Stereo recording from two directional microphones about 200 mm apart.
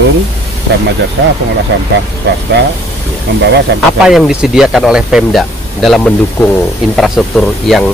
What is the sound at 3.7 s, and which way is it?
Speech, 55° right (ahead or behind).